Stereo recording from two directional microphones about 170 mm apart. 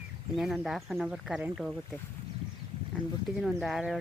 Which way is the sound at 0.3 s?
Centre (ahead or behind).